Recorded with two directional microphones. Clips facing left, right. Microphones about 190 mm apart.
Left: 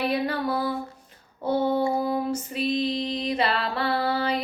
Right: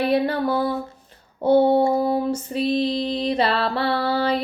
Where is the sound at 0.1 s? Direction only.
30° right (ahead or behind).